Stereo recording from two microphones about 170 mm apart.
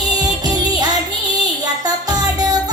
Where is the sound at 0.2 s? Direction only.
25° right (ahead or behind).